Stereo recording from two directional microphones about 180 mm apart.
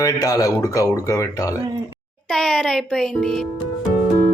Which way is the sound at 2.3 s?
Centre (ahead or behind).